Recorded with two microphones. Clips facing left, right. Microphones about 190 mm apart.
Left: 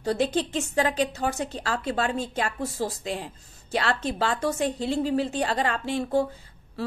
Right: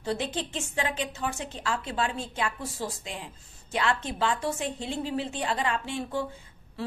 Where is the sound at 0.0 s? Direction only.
40° left (ahead or behind).